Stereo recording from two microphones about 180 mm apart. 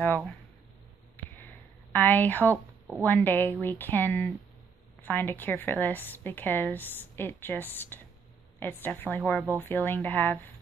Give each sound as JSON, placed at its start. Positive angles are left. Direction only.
{"t": 0.0, "sound": "speech", "side_deg": 5}
{"t": 1.9, "sound": "a woman's voice", "side_deg": 10}